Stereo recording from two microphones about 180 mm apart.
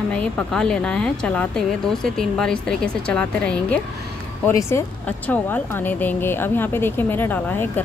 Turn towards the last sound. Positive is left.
turn(degrees=10)  # may be behind; listen again after turning